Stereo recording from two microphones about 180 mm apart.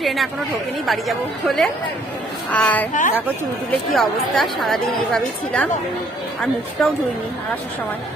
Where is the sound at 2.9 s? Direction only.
45° left (ahead or behind).